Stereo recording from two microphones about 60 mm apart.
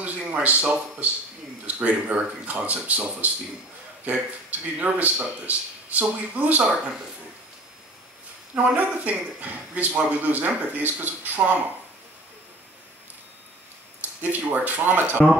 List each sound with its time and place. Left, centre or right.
0.3 s a man's voice: right
8.5 s a man's voice: right
14.2 s speech: right